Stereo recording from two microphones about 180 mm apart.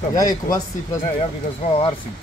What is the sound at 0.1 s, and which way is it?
Speech, 20° left (ahead or behind).